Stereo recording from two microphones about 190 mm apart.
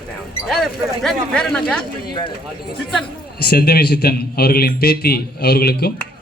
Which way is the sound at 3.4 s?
55° left (ahead or behind).